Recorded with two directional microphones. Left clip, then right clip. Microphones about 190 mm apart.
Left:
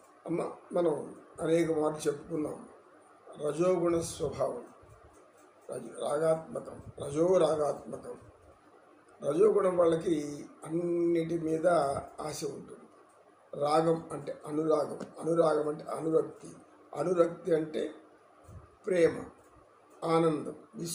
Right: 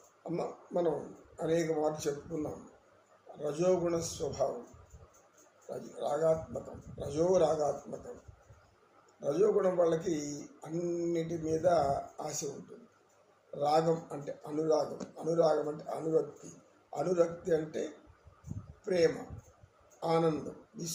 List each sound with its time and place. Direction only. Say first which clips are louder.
0.3 s speech: left 2 dB; 5° left (ahead or behind)
3.4 s speech: left 2 dB; 10° left (ahead or behind)
6.0 s speech: left 1 dB; 10° left (ahead or behind)
9.2 s speech: left 3 dB; 10° left (ahead or behind)
13.6 s speech: left 1 dB; 10° left (ahead or behind)
18.9 s speech: left 2 dB; 10° left (ahead or behind)